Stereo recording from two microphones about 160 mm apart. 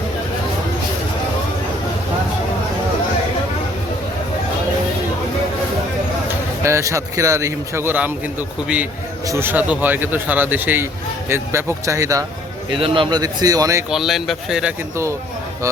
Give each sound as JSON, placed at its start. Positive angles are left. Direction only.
{"t": 6.6, "sound": "a man's voice", "side_deg": -15}
{"t": 12.7, "sound": "speech", "side_deg": -30}
{"t": 13.9, "sound": "speech", "side_deg": 0}